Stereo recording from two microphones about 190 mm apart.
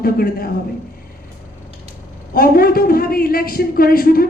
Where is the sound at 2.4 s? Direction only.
50° left (ahead or behind).